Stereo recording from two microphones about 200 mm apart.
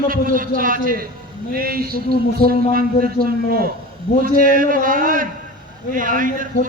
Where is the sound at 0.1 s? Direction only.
45° right (ahead or behind).